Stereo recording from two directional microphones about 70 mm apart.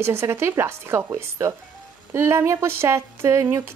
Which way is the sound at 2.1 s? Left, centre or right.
Right.